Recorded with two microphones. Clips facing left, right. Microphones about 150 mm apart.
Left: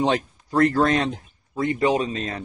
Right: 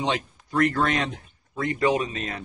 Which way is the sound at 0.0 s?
40° left (ahead or behind).